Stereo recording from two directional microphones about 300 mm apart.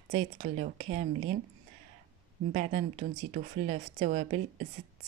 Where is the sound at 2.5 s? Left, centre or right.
Right.